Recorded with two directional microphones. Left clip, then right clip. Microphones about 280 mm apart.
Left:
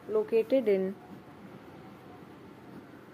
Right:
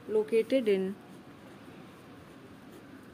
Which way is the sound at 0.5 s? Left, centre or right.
Centre.